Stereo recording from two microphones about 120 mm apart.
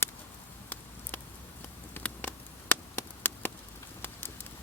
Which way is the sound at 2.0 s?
15° left (ahead or behind).